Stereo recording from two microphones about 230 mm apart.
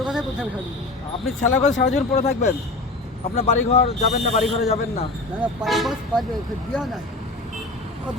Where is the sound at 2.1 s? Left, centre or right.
Left.